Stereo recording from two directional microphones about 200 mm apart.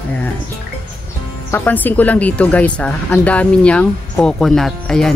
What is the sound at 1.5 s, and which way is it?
Speech, 10° left (ahead or behind).